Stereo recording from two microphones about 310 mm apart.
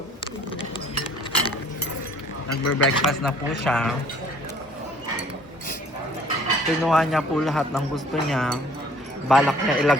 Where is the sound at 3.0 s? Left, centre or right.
Centre.